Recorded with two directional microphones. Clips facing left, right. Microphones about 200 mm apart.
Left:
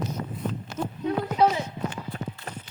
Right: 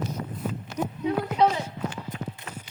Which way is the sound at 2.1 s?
40° left (ahead or behind).